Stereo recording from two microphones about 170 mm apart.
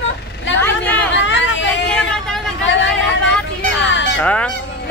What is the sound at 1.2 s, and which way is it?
Hubbub, 90° left.